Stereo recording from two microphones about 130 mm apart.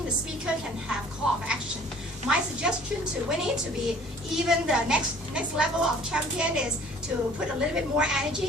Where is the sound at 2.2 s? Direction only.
5° right (ahead or behind).